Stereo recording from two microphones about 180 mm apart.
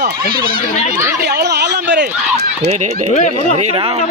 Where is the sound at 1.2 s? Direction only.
65° right (ahead or behind).